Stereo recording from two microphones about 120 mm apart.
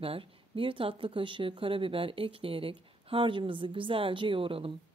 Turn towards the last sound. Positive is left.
turn(degrees=-50)  # may be behind; listen again after turning